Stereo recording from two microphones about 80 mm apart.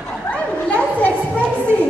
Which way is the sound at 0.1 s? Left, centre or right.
Centre.